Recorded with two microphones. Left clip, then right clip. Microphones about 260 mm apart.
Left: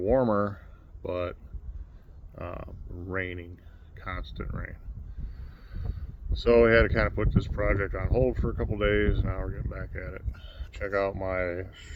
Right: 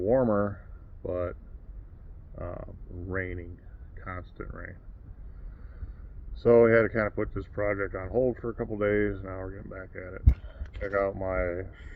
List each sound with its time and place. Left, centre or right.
0.0 s speech: centre
6.3 s speech: centre